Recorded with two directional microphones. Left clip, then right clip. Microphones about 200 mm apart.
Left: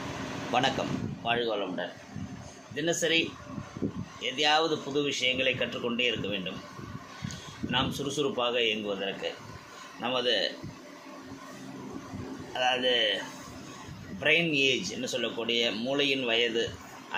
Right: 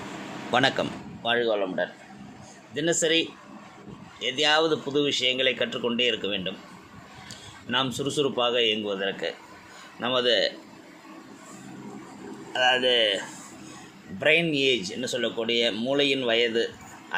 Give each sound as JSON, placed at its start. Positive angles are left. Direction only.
{"t": 0.5, "sound": "speech", "side_deg": -35}
{"t": 7.7, "sound": "speech", "side_deg": -30}
{"t": 12.5, "sound": "speech", "side_deg": -20}